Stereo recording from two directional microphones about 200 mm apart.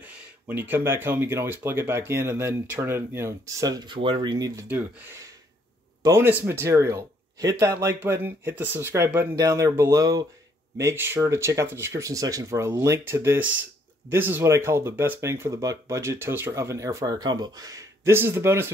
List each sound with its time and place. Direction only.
0.0 s speech: 10° right (ahead or behind)
6.0 s speech: 10° right (ahead or behind)